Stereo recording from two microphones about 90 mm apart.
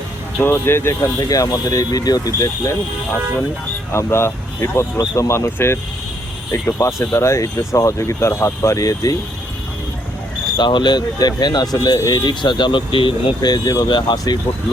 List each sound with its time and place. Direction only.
0.3 s speech: 25° left (ahead or behind)
1.3 s speech: 40° left (ahead or behind)
3.9 s speech: 30° left (ahead or behind)
10.6 s speech: 55° left (ahead or behind); by 13.3 s 75° left (ahead or behind)
13.4 s speech: 45° left (ahead or behind)
13.8 s speech: 60° left (ahead or behind)